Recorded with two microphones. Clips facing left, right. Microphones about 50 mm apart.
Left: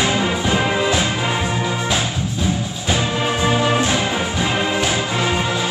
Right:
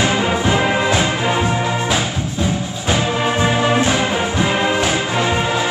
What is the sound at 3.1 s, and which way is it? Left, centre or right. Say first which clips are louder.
Music: right 2 dB; centre.